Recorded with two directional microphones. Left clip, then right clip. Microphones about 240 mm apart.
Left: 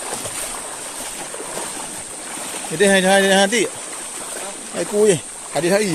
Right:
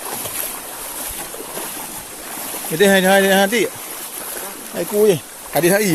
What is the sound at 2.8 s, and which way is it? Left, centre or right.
Speech, centre.